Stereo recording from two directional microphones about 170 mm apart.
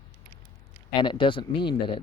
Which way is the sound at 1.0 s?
30° left (ahead or behind).